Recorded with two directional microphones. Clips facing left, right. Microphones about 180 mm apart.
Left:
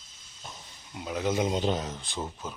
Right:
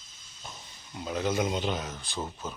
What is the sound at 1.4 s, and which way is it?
Speech, 25° left (ahead or behind).